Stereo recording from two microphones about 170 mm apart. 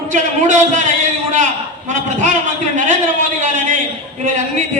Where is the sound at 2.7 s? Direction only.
45° right (ahead or behind).